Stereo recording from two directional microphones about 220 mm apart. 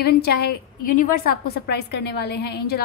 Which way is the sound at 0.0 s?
45° left (ahead or behind).